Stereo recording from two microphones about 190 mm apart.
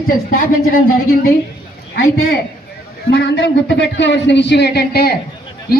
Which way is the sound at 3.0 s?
65° left (ahead or behind).